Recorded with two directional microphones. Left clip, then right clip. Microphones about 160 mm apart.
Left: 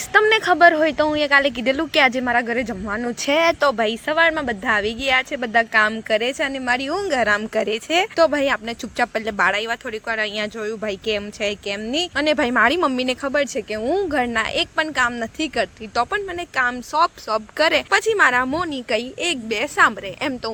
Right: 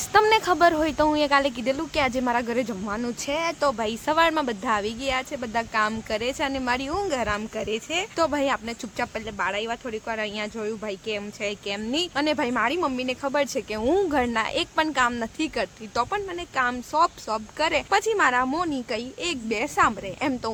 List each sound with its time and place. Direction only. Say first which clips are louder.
0.1 s speech: left 4 dB; 5° left (ahead or behind)
3.2 s speech: left 8 dB; 25° left (ahead or behind)
4.0 s speech: left 2 dB; centre (ahead or behind); by 8.0 s 35° left (ahead or behind)
8.1 s speech: left 4 dB; 20° left (ahead or behind)
9.2 s speech: left 8 dB; 40° left (ahead or behind)
13.3 s speech: left 4 dB; 10° left (ahead or behind)